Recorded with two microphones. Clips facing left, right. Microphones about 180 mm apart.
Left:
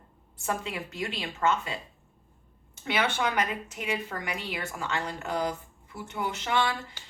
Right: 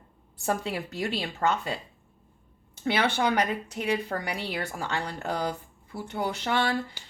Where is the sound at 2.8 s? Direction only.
30° right (ahead or behind).